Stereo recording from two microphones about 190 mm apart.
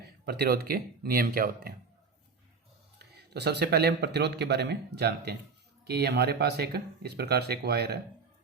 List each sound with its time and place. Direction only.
0.0 s speech: 60° right (ahead or behind)
3.3 s speech: 60° right (ahead or behind)